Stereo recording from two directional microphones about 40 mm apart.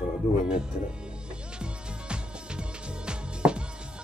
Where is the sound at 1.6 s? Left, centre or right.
Right.